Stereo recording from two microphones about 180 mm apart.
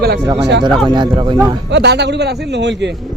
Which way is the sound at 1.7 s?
70° right (ahead or behind).